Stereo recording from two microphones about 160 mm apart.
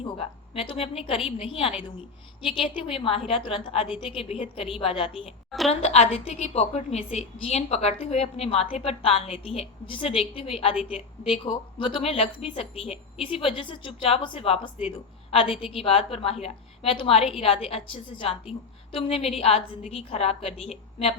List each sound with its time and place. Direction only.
0.0 s a woman's voice: 35° left (ahead or behind)
5.5 s a woman's voice: centre (ahead or behind)
5.8 s a woman's voice: 40° left (ahead or behind)